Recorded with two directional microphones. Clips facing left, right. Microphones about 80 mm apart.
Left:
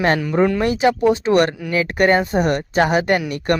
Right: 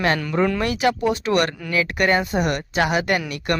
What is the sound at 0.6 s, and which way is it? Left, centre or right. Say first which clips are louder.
Speech: left 4 dB; left.